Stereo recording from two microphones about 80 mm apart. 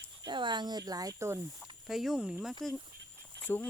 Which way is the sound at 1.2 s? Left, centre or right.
Right.